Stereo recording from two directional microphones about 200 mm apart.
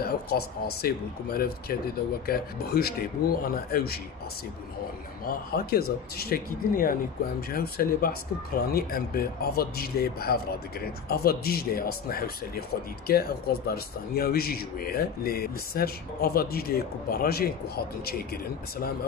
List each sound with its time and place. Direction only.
0.0 s speech: 50° left (ahead or behind)
5.2 s speech: 50° left (ahead or behind)